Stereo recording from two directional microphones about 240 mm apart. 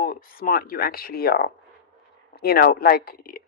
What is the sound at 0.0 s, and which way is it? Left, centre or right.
Speech, left.